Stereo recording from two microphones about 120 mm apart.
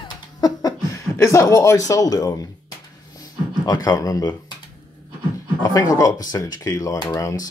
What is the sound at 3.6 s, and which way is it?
Speech, 35° left (ahead or behind).